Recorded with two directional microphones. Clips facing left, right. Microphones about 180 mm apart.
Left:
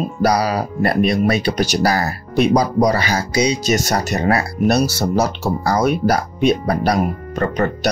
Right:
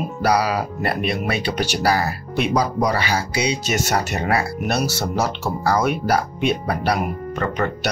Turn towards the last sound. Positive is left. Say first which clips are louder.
# left 4 dB
turn(degrees=40)  # may be behind; listen again after turning